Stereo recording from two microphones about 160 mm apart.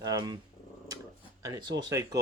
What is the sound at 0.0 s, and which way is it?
Speech, 25° right (ahead or behind).